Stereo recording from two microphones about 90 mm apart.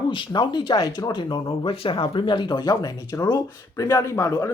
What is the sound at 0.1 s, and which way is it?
Speech, 60° left (ahead or behind).